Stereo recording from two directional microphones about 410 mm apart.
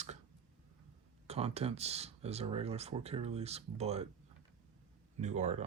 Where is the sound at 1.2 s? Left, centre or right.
Centre.